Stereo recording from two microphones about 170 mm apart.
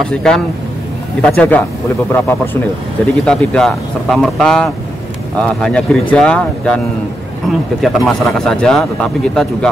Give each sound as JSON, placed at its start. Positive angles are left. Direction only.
{"t": 0.1, "sound": "speech", "side_deg": 5}